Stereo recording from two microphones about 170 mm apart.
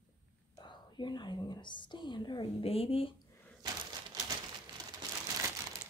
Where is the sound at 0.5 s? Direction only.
25° left (ahead or behind).